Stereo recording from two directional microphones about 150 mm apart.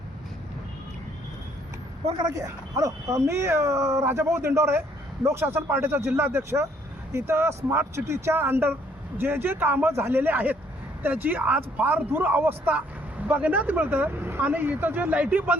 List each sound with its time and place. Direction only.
2.1 s speech: 25° right (ahead or behind)